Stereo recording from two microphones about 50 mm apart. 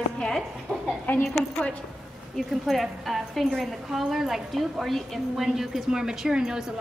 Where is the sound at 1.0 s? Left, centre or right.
Left.